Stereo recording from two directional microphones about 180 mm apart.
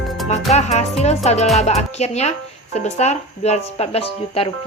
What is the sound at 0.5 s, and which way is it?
Speech, 40° left (ahead or behind).